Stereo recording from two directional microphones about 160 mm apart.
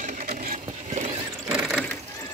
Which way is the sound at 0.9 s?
40° right (ahead or behind).